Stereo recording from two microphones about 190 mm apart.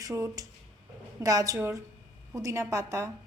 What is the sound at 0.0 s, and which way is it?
A woman's voice, 15° right (ahead or behind).